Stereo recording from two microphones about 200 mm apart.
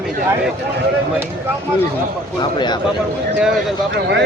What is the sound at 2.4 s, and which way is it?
Speech, 20° left (ahead or behind).